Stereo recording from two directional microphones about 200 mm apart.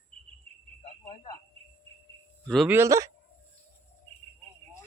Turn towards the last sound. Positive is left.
turn(degrees=-15)  # may be behind; listen again after turning